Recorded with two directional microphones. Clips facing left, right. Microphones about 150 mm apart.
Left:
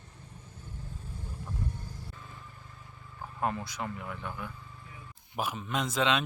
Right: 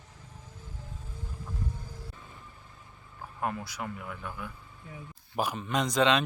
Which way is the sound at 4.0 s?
20° left (ahead or behind).